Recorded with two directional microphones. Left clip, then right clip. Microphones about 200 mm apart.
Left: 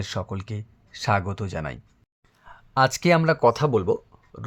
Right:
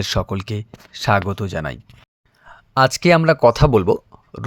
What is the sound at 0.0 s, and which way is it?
Speech, 25° right (ahead or behind).